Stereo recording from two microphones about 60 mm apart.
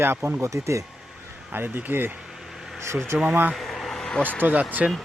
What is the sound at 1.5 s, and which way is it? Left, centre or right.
Speech, right.